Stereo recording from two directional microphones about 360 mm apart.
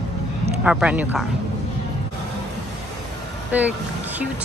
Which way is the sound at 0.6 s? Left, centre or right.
Centre.